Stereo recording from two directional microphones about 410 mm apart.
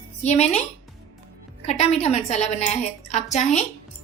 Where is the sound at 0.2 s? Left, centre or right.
Centre.